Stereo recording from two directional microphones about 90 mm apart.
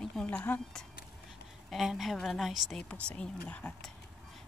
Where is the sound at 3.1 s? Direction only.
15° left (ahead or behind).